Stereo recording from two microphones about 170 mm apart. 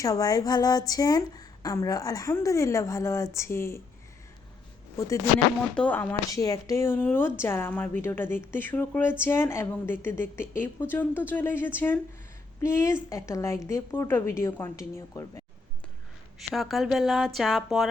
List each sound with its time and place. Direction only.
0.0 s speech: 20° left (ahead or behind)
4.9 s speech: 20° left (ahead or behind)
16.4 s speech: centre (ahead or behind)